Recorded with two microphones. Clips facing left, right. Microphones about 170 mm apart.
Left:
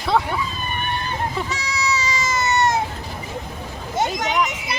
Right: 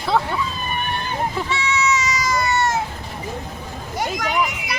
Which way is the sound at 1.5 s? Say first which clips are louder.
Right 4 dB; 35° left (ahead or behind).